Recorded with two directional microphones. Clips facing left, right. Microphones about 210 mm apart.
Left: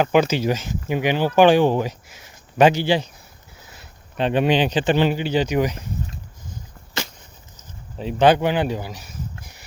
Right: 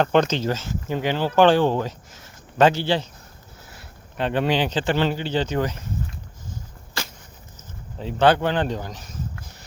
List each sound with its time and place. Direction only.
0.0 s speech: 5° left (ahead or behind)
7.5 s speech: 15° left (ahead or behind)
9.4 s a sound: 10° left (ahead or behind)